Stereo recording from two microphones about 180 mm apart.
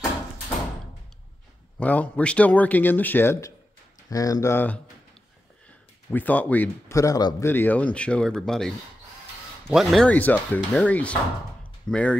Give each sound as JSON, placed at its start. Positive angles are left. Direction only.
{"t": 1.8, "sound": "speech", "side_deg": 10}
{"t": 6.0, "sound": "speech", "side_deg": 10}